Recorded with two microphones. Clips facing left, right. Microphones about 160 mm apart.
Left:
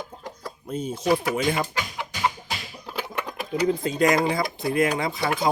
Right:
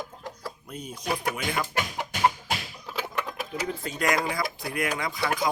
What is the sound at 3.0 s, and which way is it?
Typing, centre (ahead or behind).